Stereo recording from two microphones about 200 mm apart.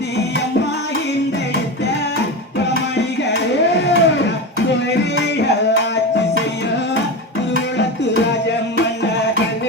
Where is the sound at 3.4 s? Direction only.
60° left (ahead or behind).